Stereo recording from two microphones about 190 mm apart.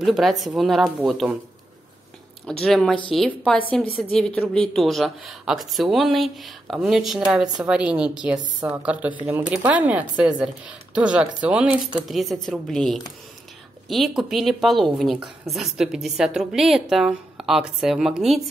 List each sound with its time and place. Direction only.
0.0 s speech: centre (ahead or behind)
2.4 s speech: 5° left (ahead or behind)
8.5 s speech: 15° right (ahead or behind); by 18.4 s centre (ahead or behind)